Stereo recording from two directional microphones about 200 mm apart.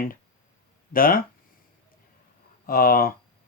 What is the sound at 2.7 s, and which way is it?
Speech, 45° left (ahead or behind).